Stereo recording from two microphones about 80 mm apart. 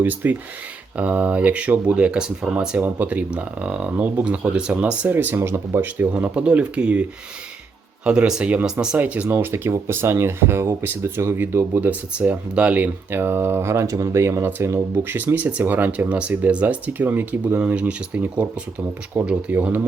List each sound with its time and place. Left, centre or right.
0.0 s speech: right
8.0 s speech: centre
9.3 s speech: right